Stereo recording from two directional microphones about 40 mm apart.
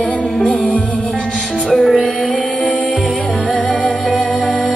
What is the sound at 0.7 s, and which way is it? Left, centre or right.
Music, left.